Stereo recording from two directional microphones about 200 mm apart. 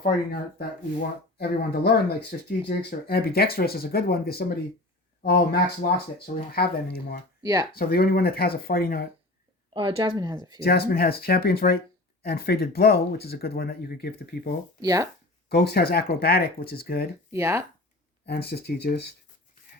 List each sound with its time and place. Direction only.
1.4 s speech: 50° left (ahead or behind)
7.4 s speech: 15° right (ahead or behind)
7.8 s speech: 50° left (ahead or behind)
9.7 s speech: 25° right (ahead or behind)
10.6 s speech: 50° left (ahead or behind)
14.8 s speech: 15° right (ahead or behind)
15.4 s speech: 55° left (ahead or behind)
17.3 s speech: 10° right (ahead or behind)
18.3 s speech: 55° left (ahead or behind)